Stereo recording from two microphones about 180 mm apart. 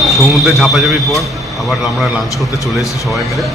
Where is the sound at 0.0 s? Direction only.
Centre (ahead or behind).